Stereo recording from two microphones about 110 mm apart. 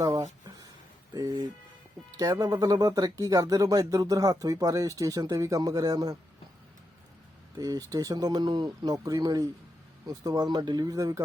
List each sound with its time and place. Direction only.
0.0 s a sound: 35° right (ahead or behind)
1.1 s speech: 35° right (ahead or behind)
7.6 s speech: 35° right (ahead or behind)